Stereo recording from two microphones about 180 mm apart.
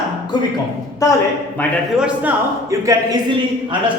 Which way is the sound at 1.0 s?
20° left (ahead or behind).